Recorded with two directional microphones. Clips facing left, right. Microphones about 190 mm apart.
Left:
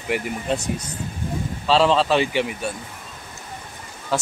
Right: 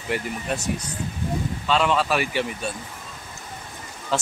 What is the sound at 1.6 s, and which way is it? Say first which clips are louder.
A man's voice: left 4 dB; 30° left (ahead or behind).